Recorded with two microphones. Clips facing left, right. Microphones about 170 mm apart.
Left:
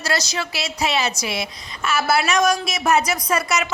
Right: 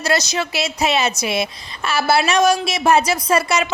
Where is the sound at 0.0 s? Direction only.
20° right (ahead or behind).